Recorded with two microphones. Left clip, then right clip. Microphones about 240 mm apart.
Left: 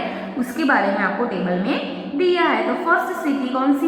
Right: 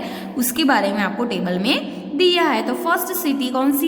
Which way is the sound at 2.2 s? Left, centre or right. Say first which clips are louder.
Right 1 dB; right.